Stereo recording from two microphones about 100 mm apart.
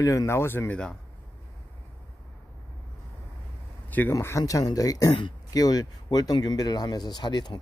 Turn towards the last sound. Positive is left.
turn(degrees=50)  # may be behind; listen again after turning